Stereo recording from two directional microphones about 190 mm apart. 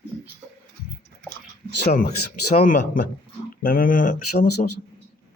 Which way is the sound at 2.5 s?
45° left (ahead or behind).